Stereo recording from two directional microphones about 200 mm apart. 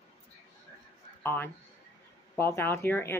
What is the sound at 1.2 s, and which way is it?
A man's voice, 10° left (ahead or behind).